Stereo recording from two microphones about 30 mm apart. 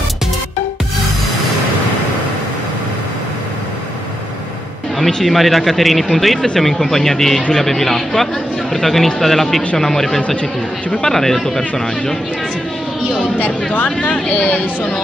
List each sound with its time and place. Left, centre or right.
4.9 s speech: centre
14.4 s speech: left